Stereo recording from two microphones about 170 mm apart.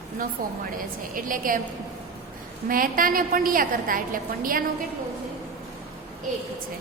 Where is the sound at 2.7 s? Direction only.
55° right (ahead or behind).